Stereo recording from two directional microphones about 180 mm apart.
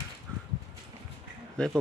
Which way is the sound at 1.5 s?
5° left (ahead or behind).